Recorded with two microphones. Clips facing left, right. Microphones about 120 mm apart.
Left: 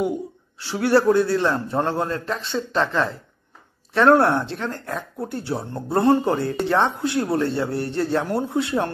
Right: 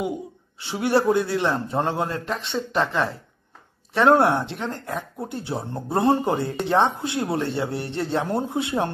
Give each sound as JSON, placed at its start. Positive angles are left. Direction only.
{"t": 0.6, "sound": "a man's voice", "side_deg": -20}